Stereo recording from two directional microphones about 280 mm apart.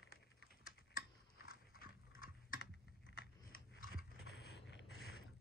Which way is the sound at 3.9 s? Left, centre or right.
Right.